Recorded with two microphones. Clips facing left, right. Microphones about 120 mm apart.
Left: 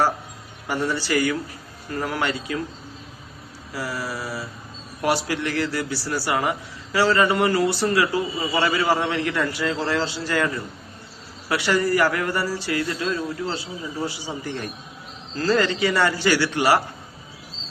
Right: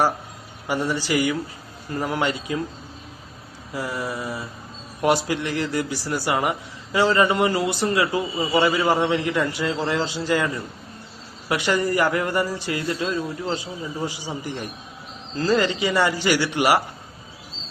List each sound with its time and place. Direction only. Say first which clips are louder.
0.7 s a man's voice: even; 15° right (ahead or behind)
3.7 s a man's voice: right 1 dB; 20° right (ahead or behind)